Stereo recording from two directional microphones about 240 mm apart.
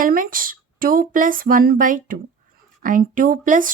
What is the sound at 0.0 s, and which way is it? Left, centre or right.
Speech, right.